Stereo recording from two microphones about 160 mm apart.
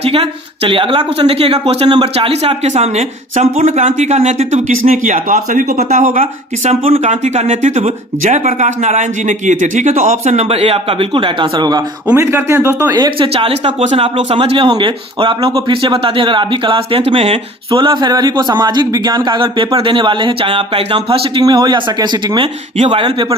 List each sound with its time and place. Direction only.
0.0 s speech: 40° right (ahead or behind)
4.9 s speech: 55° right (ahead or behind)
6.7 s a man's voice: 40° right (ahead or behind)
21.4 s a man's voice: 25° right (ahead or behind)